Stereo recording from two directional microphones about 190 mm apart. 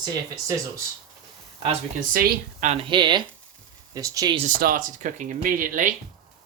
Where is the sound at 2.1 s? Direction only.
50° right (ahead or behind).